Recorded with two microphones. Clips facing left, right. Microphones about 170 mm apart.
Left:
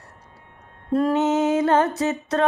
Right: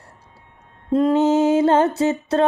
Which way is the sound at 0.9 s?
20° right (ahead or behind).